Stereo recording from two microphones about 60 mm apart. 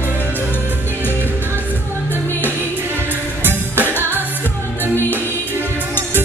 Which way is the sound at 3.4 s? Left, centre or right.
Right.